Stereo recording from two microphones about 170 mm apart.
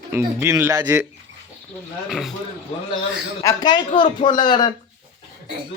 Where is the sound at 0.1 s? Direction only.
15° right (ahead or behind).